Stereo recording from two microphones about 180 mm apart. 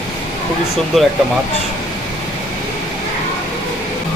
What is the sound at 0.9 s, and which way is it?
Speech, centre (ahead or behind).